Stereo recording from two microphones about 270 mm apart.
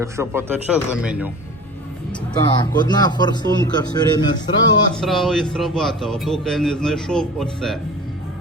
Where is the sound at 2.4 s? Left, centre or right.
Centre.